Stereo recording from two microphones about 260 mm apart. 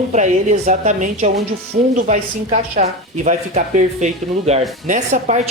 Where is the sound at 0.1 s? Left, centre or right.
Right.